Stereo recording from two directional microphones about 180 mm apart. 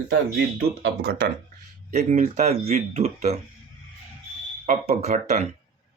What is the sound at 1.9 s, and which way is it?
Speech, 40° right (ahead or behind).